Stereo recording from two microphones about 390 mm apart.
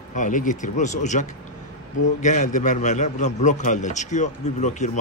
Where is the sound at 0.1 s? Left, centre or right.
Centre.